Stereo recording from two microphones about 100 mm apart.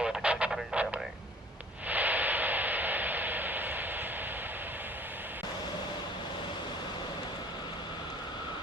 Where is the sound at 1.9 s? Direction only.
15° right (ahead or behind).